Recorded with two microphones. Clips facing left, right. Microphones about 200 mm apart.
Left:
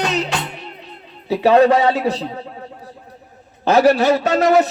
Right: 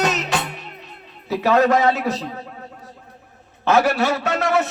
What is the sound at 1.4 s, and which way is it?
Speech, 30° left (ahead or behind).